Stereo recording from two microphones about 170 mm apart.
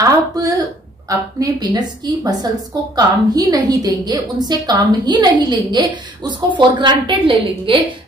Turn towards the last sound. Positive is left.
turn(degrees=-30)  # may be behind; listen again after turning